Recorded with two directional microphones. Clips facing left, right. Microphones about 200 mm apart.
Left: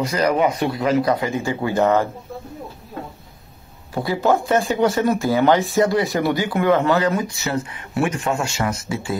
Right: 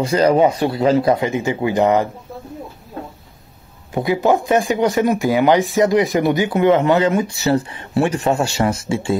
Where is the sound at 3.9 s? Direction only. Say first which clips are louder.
Right 3 dB; 15° right (ahead or behind).